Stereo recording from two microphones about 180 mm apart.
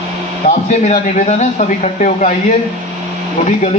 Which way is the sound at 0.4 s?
40° left (ahead or behind).